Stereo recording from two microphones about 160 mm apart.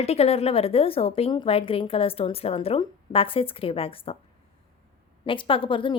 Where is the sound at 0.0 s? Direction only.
40° left (ahead or behind).